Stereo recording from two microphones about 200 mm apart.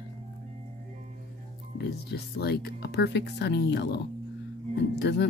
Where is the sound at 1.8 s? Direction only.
55° left (ahead or behind).